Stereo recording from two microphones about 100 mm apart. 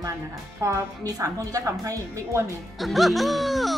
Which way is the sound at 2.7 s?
Centre (ahead or behind).